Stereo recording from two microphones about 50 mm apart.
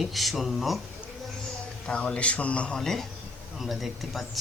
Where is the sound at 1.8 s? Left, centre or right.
Left.